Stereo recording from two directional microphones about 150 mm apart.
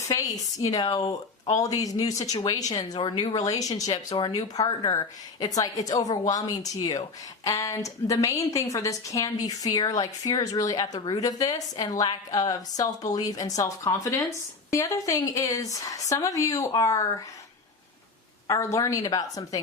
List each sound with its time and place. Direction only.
0.1 s a woman's voice: 25° left (ahead or behind)
3.9 s speech: 40° left (ahead or behind)
4.4 s a woman's voice: 30° left (ahead or behind)
18.4 s a woman's voice: 20° left (ahead or behind)